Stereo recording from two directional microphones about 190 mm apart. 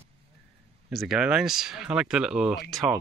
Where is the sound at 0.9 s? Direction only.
Centre (ahead or behind).